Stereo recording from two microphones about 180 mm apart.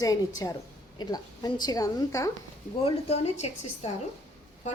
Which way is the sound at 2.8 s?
35° left (ahead or behind).